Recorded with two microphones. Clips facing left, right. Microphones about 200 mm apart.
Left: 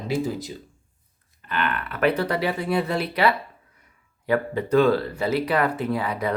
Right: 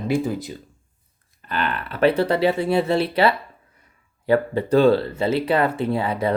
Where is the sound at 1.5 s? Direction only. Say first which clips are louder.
Right 1 dB; 35° right (ahead or behind).